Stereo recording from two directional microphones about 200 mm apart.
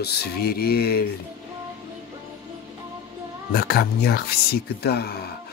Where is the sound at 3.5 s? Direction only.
50° left (ahead or behind).